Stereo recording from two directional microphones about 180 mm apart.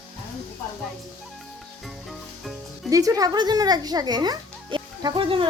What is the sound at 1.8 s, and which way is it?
Music, centre (ahead or behind).